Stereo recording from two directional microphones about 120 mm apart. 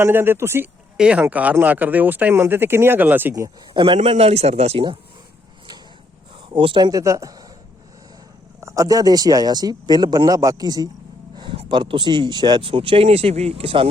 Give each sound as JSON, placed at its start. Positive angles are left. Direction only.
{"t": 0.0, "sound": "speech", "side_deg": -20}
{"t": 0.9, "sound": "speech", "side_deg": -10}
{"t": 3.8, "sound": "a man's voice", "side_deg": -45}
{"t": 6.5, "sound": "speech", "side_deg": -45}
{"t": 7.0, "sound": "speech", "side_deg": -25}
{"t": 8.6, "sound": "speech", "side_deg": -30}
{"t": 11.7, "sound": "speech", "side_deg": -45}